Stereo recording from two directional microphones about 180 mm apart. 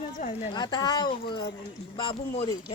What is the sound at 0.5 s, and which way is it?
Speech, 25° left (ahead or behind).